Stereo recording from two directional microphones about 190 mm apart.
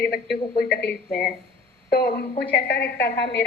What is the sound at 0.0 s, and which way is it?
A woman's voice, 60° left (ahead or behind).